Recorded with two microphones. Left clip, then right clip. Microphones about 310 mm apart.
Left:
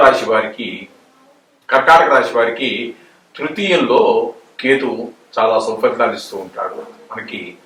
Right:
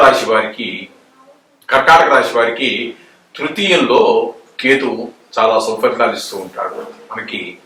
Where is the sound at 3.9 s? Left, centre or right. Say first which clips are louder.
Even; left.